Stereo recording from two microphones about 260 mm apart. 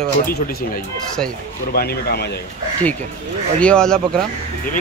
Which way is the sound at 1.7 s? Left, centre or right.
Left.